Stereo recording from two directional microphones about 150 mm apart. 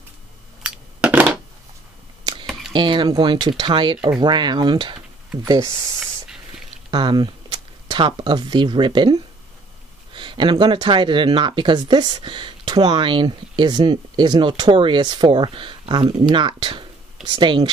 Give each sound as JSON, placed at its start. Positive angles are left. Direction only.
{"t": 0.6, "sound": "a sound", "side_deg": -5}
{"t": 2.7, "sound": "speech", "side_deg": -30}
{"t": 6.9, "sound": "speech", "side_deg": -30}